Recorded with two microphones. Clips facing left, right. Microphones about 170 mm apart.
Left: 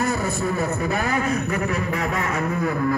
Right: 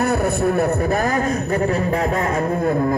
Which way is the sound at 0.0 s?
60° right (ahead or behind).